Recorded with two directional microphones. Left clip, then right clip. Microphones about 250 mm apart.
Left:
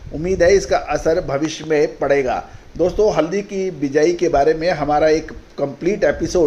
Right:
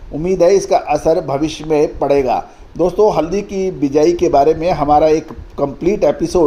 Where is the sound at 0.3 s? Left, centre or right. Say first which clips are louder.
Right 3 dB; centre.